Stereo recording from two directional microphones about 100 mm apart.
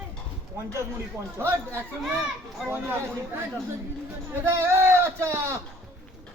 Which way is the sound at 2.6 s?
20° right (ahead or behind).